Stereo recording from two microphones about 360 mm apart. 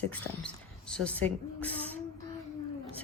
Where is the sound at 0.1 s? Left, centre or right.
Centre.